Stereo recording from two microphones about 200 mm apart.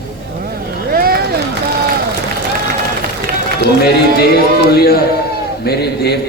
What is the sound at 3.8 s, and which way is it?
A man's voice, 50° left (ahead or behind).